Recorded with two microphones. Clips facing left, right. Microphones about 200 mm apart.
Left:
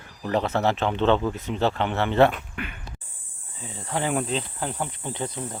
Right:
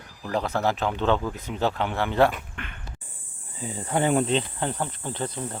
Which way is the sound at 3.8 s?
5° right (ahead or behind).